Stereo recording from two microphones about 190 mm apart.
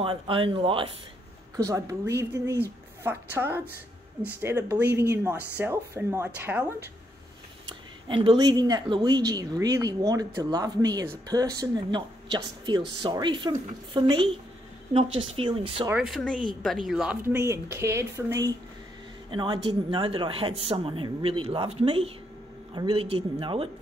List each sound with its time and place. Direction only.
0.0 s speech: 30° right (ahead or behind)
1.6 s speech: 15° right (ahead or behind)
8.1 s speech: 25° right (ahead or behind)
15.9 s speech: centre (ahead or behind); by 23.7 s 25° right (ahead or behind)